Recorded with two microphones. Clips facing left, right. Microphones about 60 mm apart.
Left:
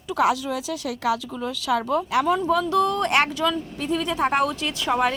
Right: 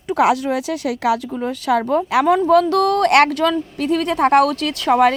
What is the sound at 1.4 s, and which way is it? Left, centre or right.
Speech, right.